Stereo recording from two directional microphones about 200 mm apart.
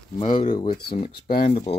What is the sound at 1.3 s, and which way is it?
Speech, 40° left (ahead or behind).